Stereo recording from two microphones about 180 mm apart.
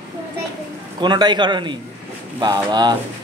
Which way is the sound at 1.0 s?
25° right (ahead or behind).